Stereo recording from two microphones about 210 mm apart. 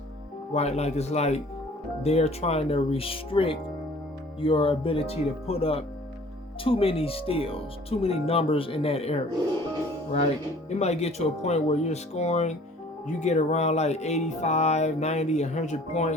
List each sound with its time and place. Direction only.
0.5 s speech: 30° left (ahead or behind)
10.8 s speech: 30° left (ahead or behind)